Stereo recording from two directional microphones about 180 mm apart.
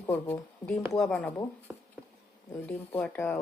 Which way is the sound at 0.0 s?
10° left (ahead or behind).